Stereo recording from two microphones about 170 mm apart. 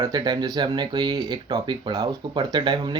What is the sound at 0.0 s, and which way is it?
Speech, 25° right (ahead or behind).